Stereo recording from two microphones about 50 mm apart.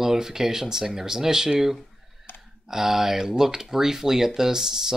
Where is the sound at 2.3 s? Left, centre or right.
Left.